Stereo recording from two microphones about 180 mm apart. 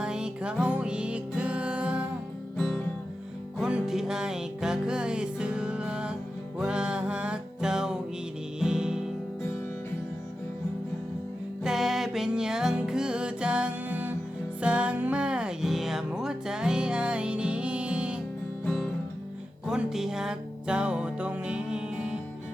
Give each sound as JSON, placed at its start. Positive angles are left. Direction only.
{"t": 0.0, "sound": "music", "side_deg": -5}
{"t": 11.6, "sound": "music", "side_deg": 0}